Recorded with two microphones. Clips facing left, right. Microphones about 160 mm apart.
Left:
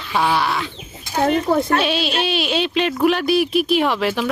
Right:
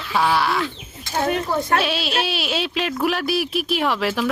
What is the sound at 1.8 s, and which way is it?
Speech, centre (ahead or behind).